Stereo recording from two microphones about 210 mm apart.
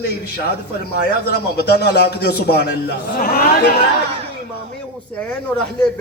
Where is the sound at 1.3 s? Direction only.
50° left (ahead or behind).